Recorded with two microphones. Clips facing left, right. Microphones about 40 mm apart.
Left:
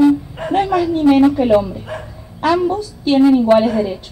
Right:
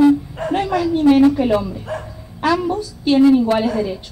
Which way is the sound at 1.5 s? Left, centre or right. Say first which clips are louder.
Left 5 dB; left.